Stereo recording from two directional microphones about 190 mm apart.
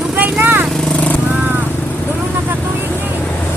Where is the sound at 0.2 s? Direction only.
10° right (ahead or behind).